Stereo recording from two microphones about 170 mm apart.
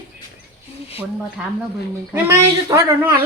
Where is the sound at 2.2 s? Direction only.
15° right (ahead or behind).